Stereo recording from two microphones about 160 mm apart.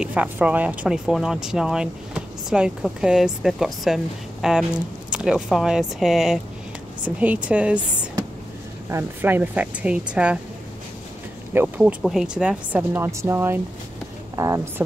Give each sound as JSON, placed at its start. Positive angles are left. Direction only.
{"t": 0.0, "sound": "speech", "side_deg": -10}
{"t": 8.8, "sound": "speech", "side_deg": -15}
{"t": 11.5, "sound": "speech", "side_deg": -10}